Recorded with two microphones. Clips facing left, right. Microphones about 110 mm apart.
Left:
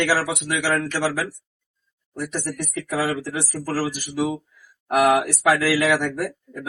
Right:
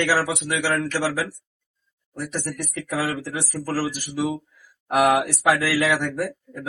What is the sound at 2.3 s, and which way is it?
Speech, 10° left (ahead or behind).